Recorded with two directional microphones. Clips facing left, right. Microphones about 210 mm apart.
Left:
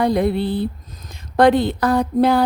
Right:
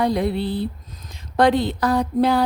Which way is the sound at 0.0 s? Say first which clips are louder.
Left 3 dB; 50° left (ahead or behind).